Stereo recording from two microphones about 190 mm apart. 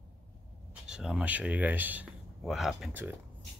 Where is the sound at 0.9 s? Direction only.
5° right (ahead or behind).